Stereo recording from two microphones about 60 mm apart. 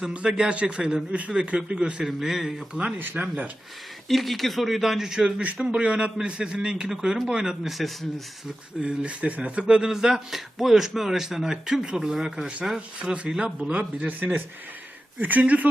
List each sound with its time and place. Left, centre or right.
0.1 s speech: centre
3.0 s speech: right
4.1 s speech: centre
5.4 s speech: right
7.6 s speech: centre
8.8 s speech: centre